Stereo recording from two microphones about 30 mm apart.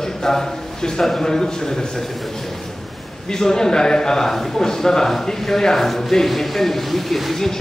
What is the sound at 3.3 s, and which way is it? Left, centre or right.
A man's voice, left.